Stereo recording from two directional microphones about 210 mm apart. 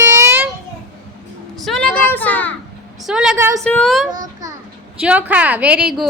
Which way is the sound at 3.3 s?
15° right (ahead or behind).